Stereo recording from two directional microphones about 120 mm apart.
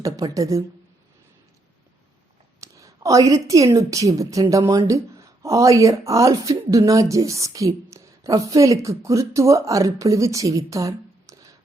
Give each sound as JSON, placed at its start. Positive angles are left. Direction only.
{"t": 0.0, "sound": "a woman's voice", "side_deg": -30}
{"t": 2.6, "sound": "a woman's voice", "side_deg": -25}